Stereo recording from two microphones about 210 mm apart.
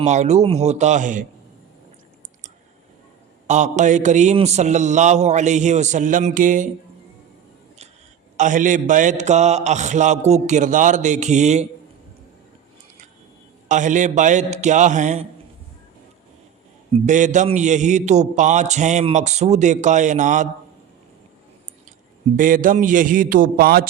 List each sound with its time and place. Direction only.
0.0 s a man's voice: 35° right (ahead or behind)
3.4 s a man's voice: 35° right (ahead or behind)
8.4 s a man's voice: 35° right (ahead or behind)
13.7 s a man's voice: 35° right (ahead or behind)
17.1 s a man's voice: 35° right (ahead or behind)
22.4 s a man's voice: 40° right (ahead or behind)